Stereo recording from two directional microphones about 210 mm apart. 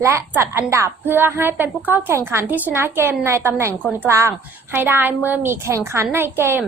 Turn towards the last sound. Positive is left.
turn(degrees=-10)  # may be behind; listen again after turning